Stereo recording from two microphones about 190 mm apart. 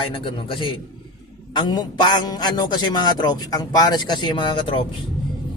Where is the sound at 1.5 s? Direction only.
20° left (ahead or behind).